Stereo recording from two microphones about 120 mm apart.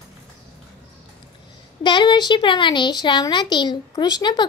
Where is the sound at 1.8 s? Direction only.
40° left (ahead or behind).